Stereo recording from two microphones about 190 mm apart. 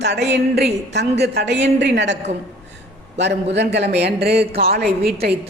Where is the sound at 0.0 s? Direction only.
65° right (ahead or behind).